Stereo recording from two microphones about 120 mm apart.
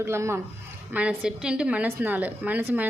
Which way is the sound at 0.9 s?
10° right (ahead or behind).